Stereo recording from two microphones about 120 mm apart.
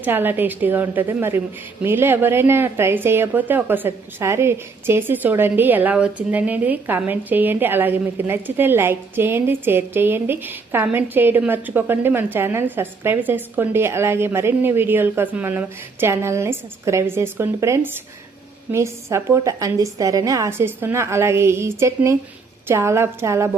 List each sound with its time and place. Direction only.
0.0 s a woman's voice: 15° right (ahead or behind)